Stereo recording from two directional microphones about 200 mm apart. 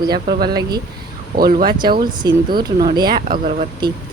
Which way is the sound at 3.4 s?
35° right (ahead or behind).